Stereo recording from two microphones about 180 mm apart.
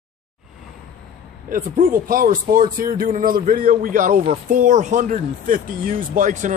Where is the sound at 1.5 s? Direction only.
50° right (ahead or behind).